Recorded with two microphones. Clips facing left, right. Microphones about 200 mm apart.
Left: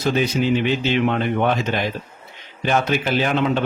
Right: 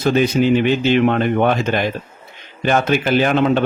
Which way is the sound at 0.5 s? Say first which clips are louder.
Right 5 dB; 55° right (ahead or behind).